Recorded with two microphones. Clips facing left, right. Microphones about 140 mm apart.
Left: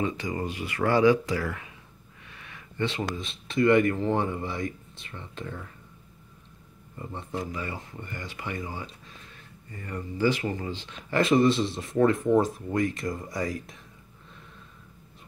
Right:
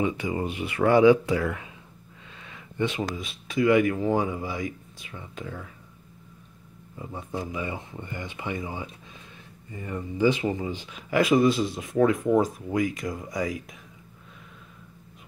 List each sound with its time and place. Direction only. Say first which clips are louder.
0.0 s speech: right 3 dB; 15° right (ahead or behind)
2.3 s a sound: right 3 dB; 20° right (ahead or behind)
3.2 s speech: left 2 dB; 5° right (ahead or behind)
7.0 s speech: right 1 dB; 5° right (ahead or behind)
7.2 s speech: right 2 dB; 20° right (ahead or behind); by 13.7 s centre (ahead or behind)